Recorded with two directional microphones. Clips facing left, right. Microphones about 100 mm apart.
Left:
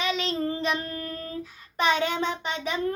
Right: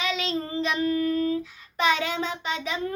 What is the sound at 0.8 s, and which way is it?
Child singing, 40° left (ahead or behind).